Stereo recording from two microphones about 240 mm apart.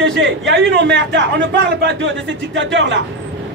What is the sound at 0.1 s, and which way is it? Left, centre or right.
Speech, right.